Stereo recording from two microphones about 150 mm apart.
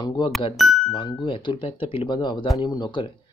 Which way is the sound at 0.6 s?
Centre (ahead or behind).